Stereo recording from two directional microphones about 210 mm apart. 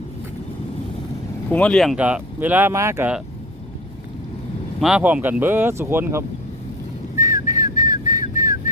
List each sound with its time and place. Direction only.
1.5 s speech: 5° left (ahead or behind); by 3.2 s 10° right (ahead or behind)
4.8 s speech: 5° right (ahead or behind)
7.2 s whistling: 15° right (ahead or behind)